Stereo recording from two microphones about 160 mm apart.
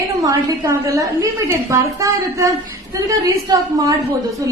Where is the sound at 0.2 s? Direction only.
20° right (ahead or behind).